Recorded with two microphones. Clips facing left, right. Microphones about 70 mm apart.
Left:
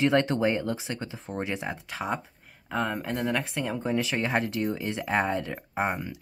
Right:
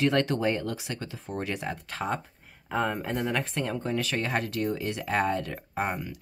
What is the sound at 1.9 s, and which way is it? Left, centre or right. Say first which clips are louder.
Speech: even; centre.